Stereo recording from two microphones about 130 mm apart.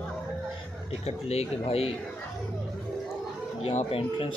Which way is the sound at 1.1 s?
50° left (ahead or behind).